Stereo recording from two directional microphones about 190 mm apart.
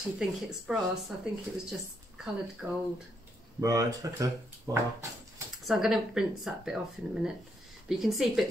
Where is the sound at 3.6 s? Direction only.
20° right (ahead or behind).